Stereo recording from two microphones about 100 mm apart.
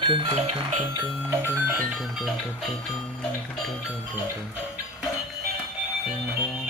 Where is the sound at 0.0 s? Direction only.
55° right (ahead or behind).